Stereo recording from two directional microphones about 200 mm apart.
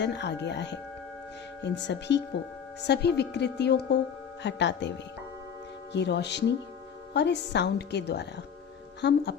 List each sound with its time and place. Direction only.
0.0 s a woman's voice: 60° left (ahead or behind)